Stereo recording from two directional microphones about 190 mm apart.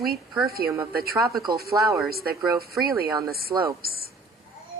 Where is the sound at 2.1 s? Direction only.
55° right (ahead or behind).